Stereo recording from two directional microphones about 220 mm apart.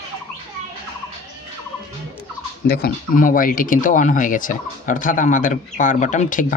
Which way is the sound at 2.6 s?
45° left (ahead or behind).